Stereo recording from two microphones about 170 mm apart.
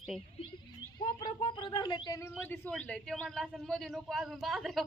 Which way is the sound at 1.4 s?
30° left (ahead or behind).